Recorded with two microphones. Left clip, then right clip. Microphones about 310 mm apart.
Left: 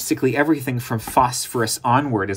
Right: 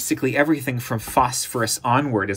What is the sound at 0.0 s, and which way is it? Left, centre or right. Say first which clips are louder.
Speech: left 1 dB; centre.